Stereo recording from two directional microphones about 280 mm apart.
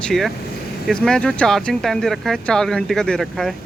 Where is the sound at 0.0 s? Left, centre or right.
Centre.